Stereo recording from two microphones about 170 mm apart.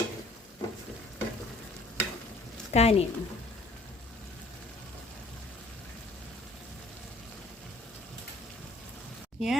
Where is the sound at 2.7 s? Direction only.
40° left (ahead or behind).